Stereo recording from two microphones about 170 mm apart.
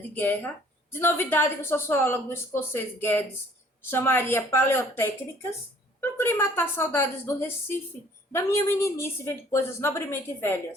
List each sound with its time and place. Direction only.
0.1 s a woman's voice: 10° left (ahead or behind)